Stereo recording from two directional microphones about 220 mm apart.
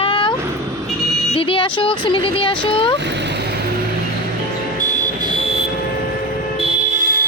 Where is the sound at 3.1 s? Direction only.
50° right (ahead or behind).